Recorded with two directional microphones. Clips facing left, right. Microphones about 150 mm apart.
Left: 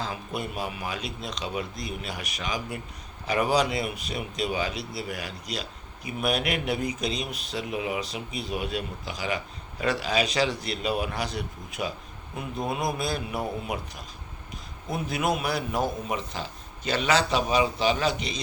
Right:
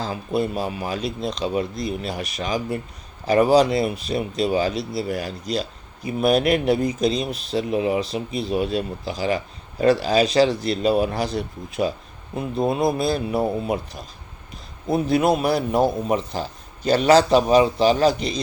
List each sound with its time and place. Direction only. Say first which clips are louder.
0.0 s speech: right 9 dB; 35° right (ahead or behind)
14.8 s speech: right 9 dB; 30° right (ahead or behind)